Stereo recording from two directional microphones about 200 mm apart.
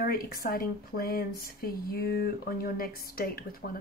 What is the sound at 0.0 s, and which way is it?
A woman's voice, 45° left (ahead or behind).